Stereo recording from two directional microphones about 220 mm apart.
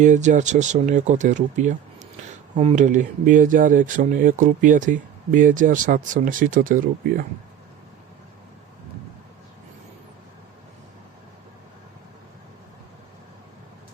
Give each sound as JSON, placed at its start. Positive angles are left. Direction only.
{"t": 0.0, "sound": "speech", "side_deg": -35}